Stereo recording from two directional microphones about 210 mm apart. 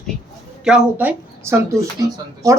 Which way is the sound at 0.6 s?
5° right (ahead or behind).